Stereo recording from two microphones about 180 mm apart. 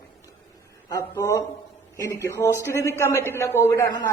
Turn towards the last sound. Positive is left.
turn(degrees=15)  # may be behind; listen again after turning